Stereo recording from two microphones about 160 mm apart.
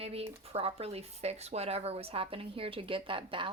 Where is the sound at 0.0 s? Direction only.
40° right (ahead or behind).